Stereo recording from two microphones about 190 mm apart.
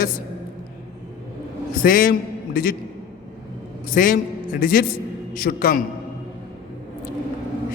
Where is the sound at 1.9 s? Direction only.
45° left (ahead or behind).